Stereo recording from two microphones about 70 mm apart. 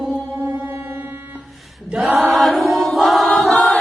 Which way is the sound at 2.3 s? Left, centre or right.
Centre.